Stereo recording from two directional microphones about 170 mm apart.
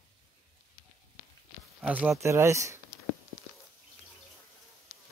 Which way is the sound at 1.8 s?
5° right (ahead or behind).